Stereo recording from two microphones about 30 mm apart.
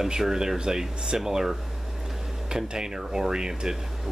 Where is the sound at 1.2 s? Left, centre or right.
Centre.